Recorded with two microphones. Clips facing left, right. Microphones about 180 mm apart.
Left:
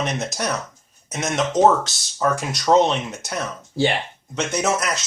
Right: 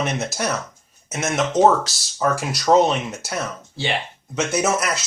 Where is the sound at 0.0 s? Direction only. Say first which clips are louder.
Right 1 dB; 5° right (ahead or behind).